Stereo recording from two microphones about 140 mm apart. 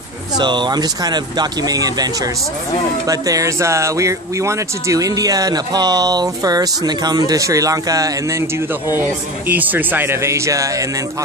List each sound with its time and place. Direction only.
0.4 s speech: 35° right (ahead or behind)
3.1 s speech: 25° right (ahead or behind)
9.5 s speech: 10° right (ahead or behind)